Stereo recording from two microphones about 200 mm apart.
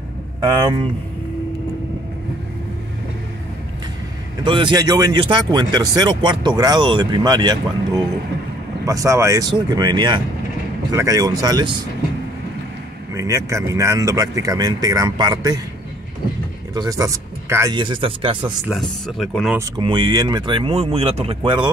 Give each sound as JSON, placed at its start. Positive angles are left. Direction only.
{"t": 4.4, "sound": "speech", "side_deg": -25}
{"t": 13.1, "sound": "speech", "side_deg": -15}
{"t": 16.7, "sound": "speech", "side_deg": -15}
{"t": 18.4, "sound": "speech", "side_deg": 0}
{"t": 19.8, "sound": "speech", "side_deg": -20}